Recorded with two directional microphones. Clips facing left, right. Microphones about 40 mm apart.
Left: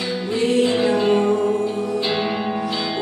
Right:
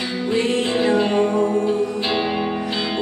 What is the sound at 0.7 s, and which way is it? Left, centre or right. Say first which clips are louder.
Music: even; centre.